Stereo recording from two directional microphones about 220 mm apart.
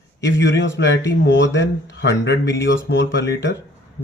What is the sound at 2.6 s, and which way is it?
Speech, 55° left (ahead or behind).